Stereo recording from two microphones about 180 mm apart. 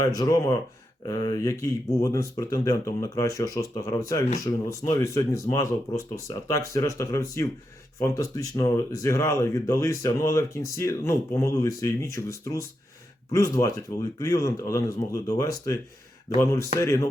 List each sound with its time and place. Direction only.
0.0 s speech: 20° left (ahead or behind)